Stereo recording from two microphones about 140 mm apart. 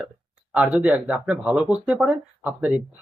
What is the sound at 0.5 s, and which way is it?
Speech, 10° right (ahead or behind).